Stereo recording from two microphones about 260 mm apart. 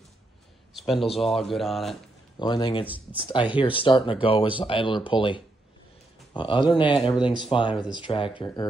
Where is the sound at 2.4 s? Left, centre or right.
Centre.